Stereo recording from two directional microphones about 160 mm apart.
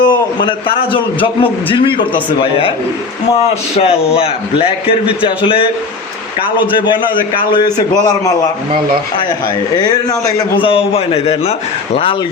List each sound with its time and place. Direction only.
0.0 s a man's voice: 30° left (ahead or behind)
6.7 s a man's voice: 30° left (ahead or behind)
9.7 s a man's voice: 25° left (ahead or behind)
10.6 s a man's voice: 35° left (ahead or behind)